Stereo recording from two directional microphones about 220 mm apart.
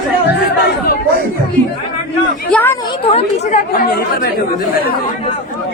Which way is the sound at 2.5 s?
10° left (ahead or behind).